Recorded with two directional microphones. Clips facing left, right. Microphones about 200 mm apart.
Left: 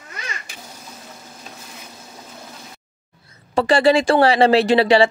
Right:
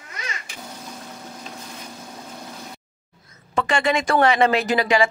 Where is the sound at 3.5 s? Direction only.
35° left (ahead or behind).